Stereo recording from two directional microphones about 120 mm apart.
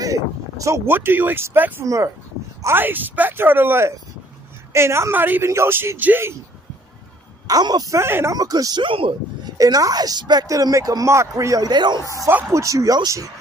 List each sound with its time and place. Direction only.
0.0 s a woman's voice: 25° right (ahead or behind)
7.4 s a woman's voice: 35° right (ahead or behind)
8.4 s speech: 30° right (ahead or behind)
8.8 s speech: 45° right (ahead or behind)
9.6 s a woman's voice: 30° right (ahead or behind)
12.3 s speech: 15° right (ahead or behind)
12.6 s a woman's voice: 30° right (ahead or behind)